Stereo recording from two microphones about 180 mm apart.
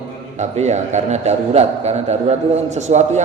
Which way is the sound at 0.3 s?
40° right (ahead or behind).